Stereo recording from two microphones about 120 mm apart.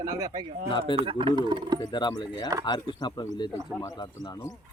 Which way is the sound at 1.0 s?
50° right (ahead or behind).